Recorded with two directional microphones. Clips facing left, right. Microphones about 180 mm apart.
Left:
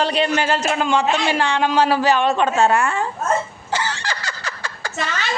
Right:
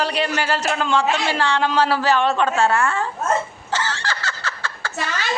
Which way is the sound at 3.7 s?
15° left (ahead or behind).